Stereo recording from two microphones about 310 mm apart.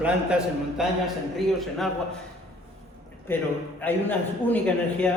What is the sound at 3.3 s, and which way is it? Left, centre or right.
A man's voice, centre.